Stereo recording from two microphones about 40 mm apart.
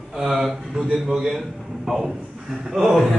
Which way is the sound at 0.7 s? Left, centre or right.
Centre.